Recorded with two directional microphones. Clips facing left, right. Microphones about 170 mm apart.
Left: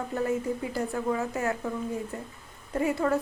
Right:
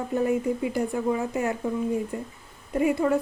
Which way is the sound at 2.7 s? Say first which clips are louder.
Right 3 dB; 15° right (ahead or behind).